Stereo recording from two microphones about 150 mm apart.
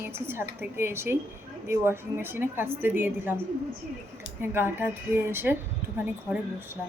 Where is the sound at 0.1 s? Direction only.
15° right (ahead or behind).